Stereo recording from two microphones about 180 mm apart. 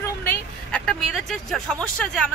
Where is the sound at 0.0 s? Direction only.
10° left (ahead or behind).